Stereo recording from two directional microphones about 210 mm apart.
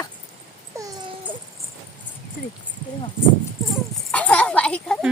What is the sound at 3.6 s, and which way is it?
Dog, centre (ahead or behind).